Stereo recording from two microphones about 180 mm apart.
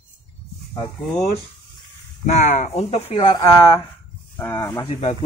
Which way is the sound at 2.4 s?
40° left (ahead or behind).